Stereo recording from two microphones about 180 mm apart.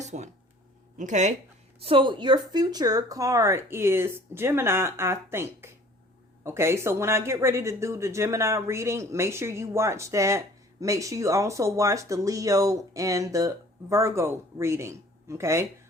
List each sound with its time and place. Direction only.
0.0 s a sound: 40° right (ahead or behind)
0.9 s speech: 40° right (ahead or behind)
1.8 s speech: 30° right (ahead or behind)